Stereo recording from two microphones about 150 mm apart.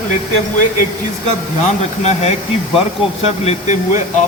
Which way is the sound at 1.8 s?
50° left (ahead or behind).